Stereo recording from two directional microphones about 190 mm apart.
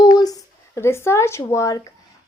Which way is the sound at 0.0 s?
20° left (ahead or behind).